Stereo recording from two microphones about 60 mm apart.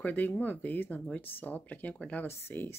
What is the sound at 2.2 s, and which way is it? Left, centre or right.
Speech, left.